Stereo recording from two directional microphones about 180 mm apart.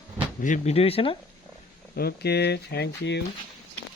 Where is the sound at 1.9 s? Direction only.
60° left (ahead or behind).